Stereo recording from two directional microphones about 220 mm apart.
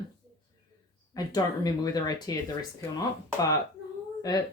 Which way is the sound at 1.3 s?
15° left (ahead or behind).